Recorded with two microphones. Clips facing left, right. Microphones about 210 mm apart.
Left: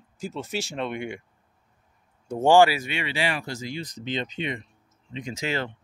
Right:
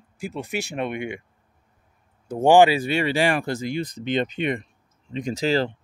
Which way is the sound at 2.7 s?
35° right (ahead or behind).